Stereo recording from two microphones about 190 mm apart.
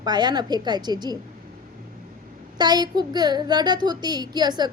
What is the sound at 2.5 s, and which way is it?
A woman's voice, 20° right (ahead or behind).